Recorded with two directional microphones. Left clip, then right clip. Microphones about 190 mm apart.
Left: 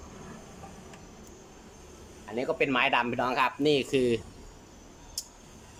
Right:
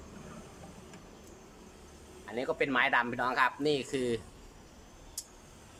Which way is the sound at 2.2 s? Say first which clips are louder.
Left 4 dB; 5° left (ahead or behind).